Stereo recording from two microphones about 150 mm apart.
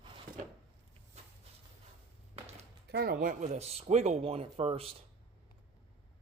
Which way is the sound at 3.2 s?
55° right (ahead or behind).